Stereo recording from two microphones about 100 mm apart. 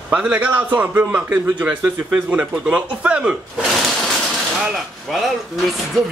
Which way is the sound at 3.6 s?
Centre (ahead or behind).